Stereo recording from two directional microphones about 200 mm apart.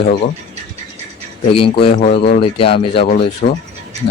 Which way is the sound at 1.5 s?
25° left (ahead or behind).